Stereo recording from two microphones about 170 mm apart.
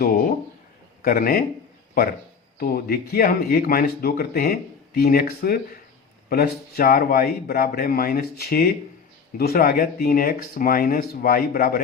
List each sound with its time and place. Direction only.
1.0 s speech: 60° left (ahead or behind)
2.6 s speech: 60° left (ahead or behind)